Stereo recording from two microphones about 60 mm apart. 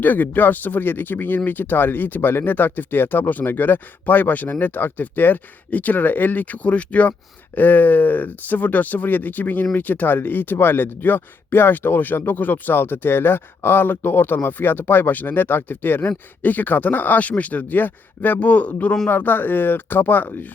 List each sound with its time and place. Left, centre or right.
0.0 s speech: left
19.0 s speech: left